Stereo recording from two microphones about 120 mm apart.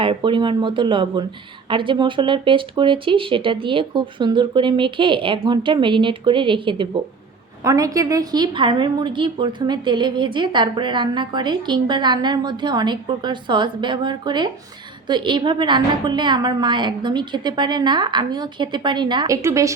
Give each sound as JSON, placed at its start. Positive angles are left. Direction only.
{"t": 0.0, "sound": "speech", "side_deg": -45}
{"t": 7.6, "sound": "a woman's voice", "side_deg": -30}
{"t": 19.4, "sound": "a woman's voice", "side_deg": -25}